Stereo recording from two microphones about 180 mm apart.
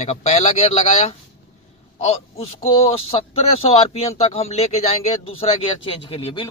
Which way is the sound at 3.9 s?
35° left (ahead or behind).